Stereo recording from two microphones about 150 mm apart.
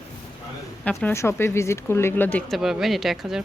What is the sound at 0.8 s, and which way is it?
Speech, 10° left (ahead or behind).